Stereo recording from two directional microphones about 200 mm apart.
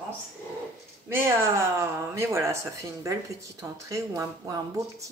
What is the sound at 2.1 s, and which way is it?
Speech, 15° right (ahead or behind).